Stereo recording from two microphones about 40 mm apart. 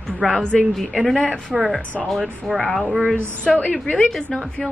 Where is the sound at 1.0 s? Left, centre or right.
Centre.